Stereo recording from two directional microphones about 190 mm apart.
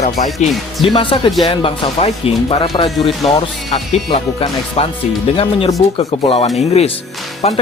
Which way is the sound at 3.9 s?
30° left (ahead or behind).